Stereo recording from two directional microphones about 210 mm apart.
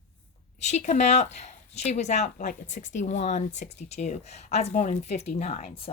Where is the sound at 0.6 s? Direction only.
35° left (ahead or behind).